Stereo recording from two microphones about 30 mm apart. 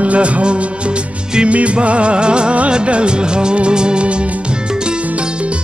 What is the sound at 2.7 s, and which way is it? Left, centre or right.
Music of bollywood, right.